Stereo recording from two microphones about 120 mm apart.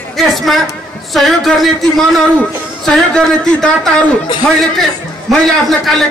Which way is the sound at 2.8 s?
5° left (ahead or behind).